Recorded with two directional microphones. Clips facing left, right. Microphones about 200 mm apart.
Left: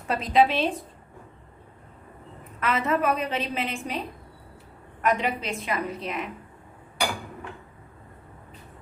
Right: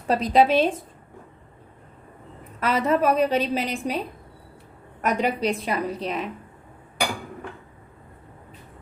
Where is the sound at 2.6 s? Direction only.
35° right (ahead or behind).